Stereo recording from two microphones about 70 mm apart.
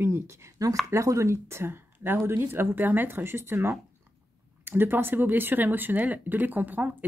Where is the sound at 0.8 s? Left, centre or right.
Right.